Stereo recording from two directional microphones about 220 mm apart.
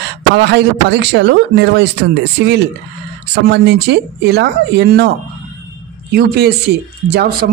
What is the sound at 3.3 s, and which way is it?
Speech, 50° right (ahead or behind).